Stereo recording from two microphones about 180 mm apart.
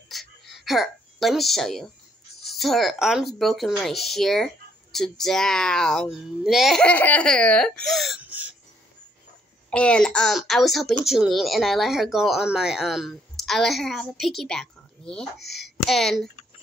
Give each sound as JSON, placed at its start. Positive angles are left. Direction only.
{"t": 0.1, "sound": "a sound", "side_deg": 0}
{"t": 2.4, "sound": "speech", "side_deg": 0}
{"t": 9.7, "sound": "speech", "side_deg": 5}